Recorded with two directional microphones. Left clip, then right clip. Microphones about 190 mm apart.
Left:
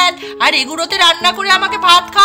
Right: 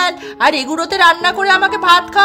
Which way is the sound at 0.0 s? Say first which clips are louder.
Left 1 dB; 40° right (ahead or behind).